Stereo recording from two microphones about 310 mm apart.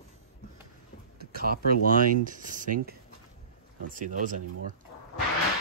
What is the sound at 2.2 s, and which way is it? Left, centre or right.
Speech, right.